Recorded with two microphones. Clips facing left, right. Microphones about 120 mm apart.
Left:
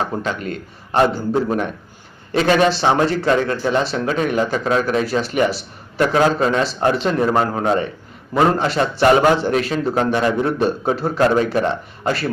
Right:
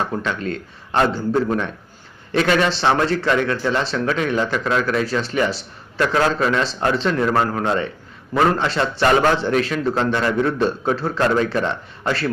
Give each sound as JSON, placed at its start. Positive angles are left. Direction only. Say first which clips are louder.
{"t": 0.0, "sound": "a man's voice", "louder": "left 1 dB", "side_deg": 15}
{"t": 3.2, "sound": "speech", "louder": "left 2 dB", "side_deg": 35}
{"t": 3.6, "sound": "a man's voice", "louder": "left 2 dB", "side_deg": 15}